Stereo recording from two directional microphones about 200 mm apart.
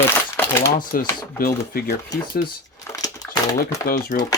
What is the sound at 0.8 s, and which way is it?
Speech, 45° left (ahead or behind).